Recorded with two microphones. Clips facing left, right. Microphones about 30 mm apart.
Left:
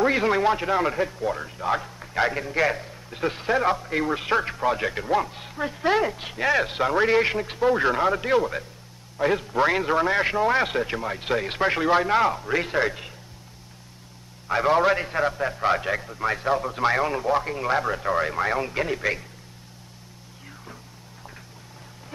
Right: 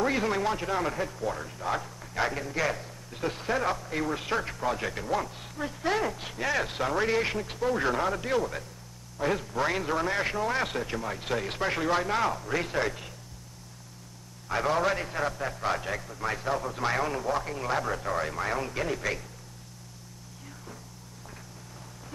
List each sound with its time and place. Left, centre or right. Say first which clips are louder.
0.0 s a man's voice: left 6 dB; left
14.5 s a man's voice: left 6 dB; left